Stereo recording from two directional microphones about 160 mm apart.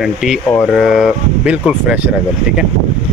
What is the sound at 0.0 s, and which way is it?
Speech, centre (ahead or behind).